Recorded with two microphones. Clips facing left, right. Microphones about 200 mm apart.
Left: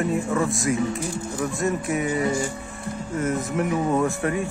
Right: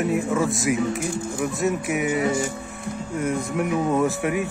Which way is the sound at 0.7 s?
15° right (ahead or behind).